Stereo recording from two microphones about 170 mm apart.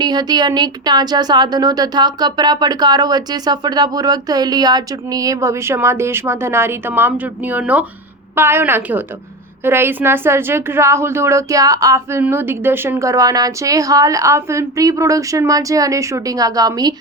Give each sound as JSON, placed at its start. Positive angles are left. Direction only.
{"t": 0.0, "sound": "a woman's voice", "side_deg": -25}